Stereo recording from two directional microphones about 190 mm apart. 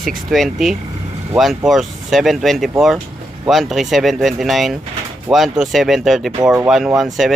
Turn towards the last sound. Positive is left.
turn(degrees=0)  # may be behind; listen again after turning